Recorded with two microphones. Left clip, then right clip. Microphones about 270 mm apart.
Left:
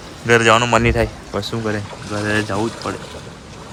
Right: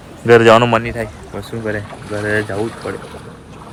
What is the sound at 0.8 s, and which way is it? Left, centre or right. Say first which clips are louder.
Speech: left 5 dB; left.